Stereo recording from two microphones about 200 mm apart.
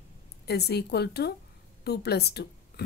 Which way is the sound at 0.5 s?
55° left (ahead or behind).